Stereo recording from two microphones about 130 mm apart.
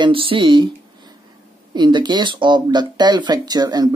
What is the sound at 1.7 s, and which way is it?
Speech, 35° right (ahead or behind).